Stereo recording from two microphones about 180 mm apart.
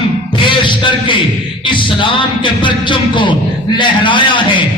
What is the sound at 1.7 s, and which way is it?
Speech, 25° left (ahead or behind).